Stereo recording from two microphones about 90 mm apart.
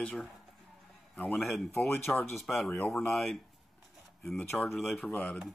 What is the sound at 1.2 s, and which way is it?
Speech, 5° left (ahead or behind).